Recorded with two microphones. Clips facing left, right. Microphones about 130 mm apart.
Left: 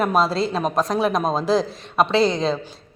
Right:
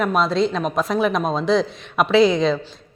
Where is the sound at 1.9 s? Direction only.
30° left (ahead or behind).